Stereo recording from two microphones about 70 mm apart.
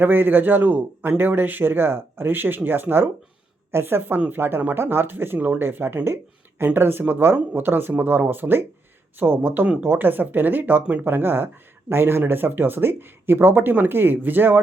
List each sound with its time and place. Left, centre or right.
0.0 s a man's voice: right